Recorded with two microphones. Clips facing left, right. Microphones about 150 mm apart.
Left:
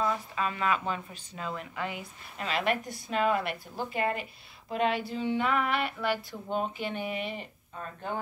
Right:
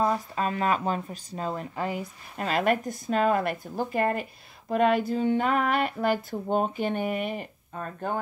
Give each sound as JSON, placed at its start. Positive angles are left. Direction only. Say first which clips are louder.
{"t": 0.0, "sound": "speech", "louder": "right 4 dB", "side_deg": -40}